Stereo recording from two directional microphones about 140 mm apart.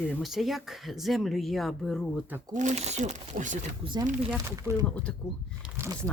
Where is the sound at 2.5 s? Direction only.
60° right (ahead or behind).